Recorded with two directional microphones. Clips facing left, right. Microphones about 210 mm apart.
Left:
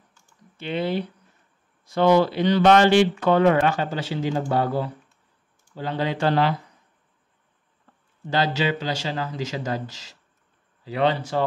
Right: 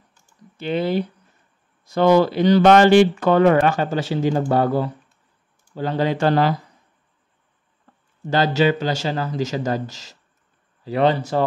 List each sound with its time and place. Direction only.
0.6 s speech: 40° right (ahead or behind)
8.3 s speech: 45° right (ahead or behind)